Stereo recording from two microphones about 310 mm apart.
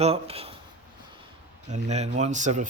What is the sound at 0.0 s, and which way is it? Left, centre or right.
Speech, centre.